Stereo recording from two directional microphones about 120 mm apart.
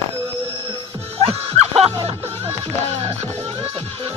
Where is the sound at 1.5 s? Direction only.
60° right (ahead or behind).